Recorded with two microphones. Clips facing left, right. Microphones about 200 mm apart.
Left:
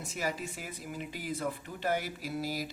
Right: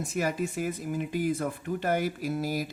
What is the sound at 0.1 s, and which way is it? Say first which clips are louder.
Speech: right 6 dB; 50° right (ahead or behind).